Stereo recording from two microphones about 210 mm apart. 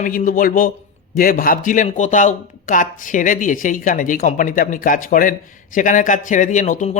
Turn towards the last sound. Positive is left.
turn(degrees=35)  # may be behind; listen again after turning